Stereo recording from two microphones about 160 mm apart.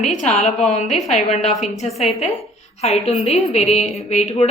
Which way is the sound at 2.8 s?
40° left (ahead or behind).